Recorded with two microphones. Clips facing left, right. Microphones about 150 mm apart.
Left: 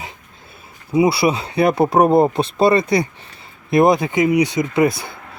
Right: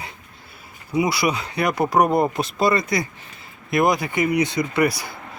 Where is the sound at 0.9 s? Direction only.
30° left (ahead or behind).